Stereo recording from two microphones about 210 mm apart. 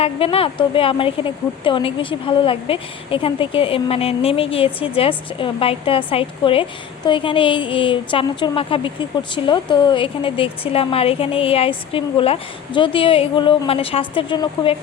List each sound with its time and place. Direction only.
0.0 s a woman's voice: 25° left (ahead or behind)